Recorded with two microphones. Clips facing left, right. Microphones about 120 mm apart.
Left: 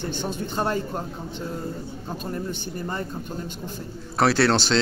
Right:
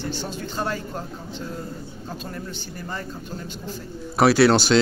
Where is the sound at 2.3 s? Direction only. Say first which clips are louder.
Left 4 dB; 25° left (ahead or behind).